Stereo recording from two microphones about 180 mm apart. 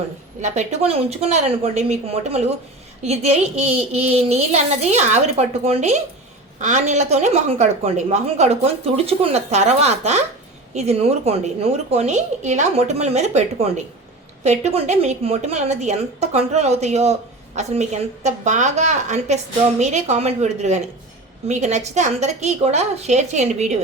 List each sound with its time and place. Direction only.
0.4 s a woman's voice: 40° right (ahead or behind)